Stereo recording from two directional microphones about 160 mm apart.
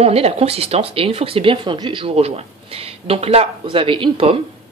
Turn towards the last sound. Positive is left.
turn(degrees=-35)  # may be behind; listen again after turning